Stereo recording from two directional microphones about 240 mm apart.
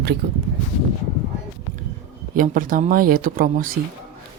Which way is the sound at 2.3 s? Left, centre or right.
Right.